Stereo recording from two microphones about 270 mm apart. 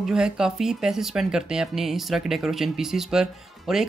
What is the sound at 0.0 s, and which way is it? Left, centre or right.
Speech, centre.